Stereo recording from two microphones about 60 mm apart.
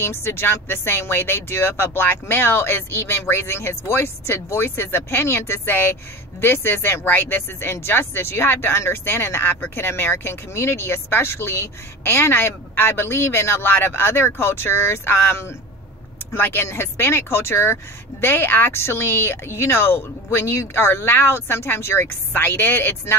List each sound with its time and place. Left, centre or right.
0.0 s speech: left
16.3 s speech: left